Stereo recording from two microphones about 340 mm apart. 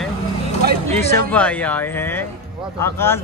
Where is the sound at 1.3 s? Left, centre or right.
Centre.